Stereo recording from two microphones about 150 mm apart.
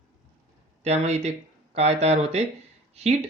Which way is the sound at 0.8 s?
45° right (ahead or behind).